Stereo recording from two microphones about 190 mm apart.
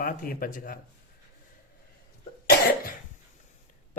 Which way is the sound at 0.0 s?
50° left (ahead or behind).